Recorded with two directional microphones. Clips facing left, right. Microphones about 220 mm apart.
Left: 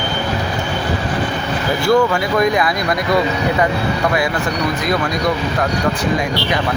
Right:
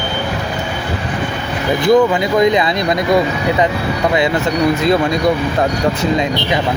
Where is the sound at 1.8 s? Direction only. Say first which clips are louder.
Right 3 dB; 20° right (ahead or behind).